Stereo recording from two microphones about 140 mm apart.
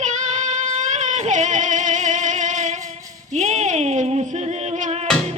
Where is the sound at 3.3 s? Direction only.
55° right (ahead or behind).